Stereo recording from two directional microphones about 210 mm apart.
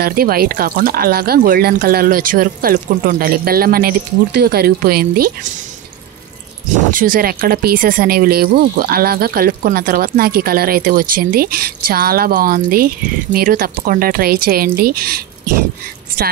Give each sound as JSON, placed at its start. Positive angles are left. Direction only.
{"t": 0.0, "sound": "speech", "side_deg": -45}
{"t": 6.9, "sound": "speech", "side_deg": -40}